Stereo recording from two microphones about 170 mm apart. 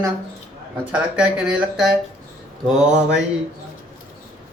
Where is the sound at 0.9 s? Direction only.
5° right (ahead or behind).